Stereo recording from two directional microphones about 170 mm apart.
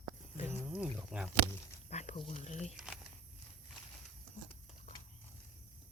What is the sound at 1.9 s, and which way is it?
Speech, 40° left (ahead or behind).